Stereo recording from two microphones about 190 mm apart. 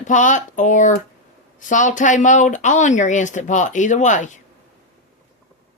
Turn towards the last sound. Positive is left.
turn(degrees=40)  # may be behind; listen again after turning